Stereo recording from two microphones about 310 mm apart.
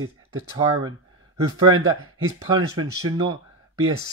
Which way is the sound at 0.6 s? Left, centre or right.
Centre.